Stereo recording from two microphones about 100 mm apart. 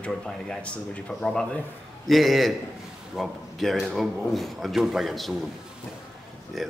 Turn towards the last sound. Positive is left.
turn(degrees=0)  # may be behind; listen again after turning